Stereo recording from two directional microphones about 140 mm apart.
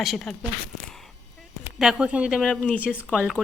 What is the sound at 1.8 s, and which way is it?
Speech, 5° right (ahead or behind).